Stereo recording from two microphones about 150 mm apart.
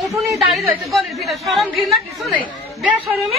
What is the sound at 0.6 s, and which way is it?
A woman's voice, centre (ahead or behind).